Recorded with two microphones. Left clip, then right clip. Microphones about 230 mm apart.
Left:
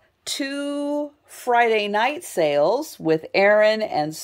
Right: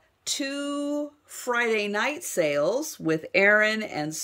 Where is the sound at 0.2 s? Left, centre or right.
Centre.